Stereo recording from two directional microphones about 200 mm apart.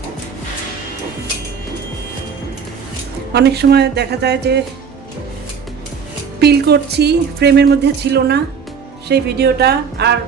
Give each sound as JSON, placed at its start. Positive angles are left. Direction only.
{"t": 3.3, "sound": "speech", "side_deg": -55}
{"t": 6.4, "sound": "speech", "side_deg": -55}